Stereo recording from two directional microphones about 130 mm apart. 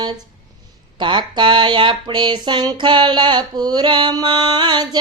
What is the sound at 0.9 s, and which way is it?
Speech, 35° right (ahead or behind).